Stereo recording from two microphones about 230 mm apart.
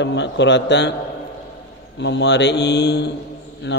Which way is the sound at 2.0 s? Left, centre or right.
Left.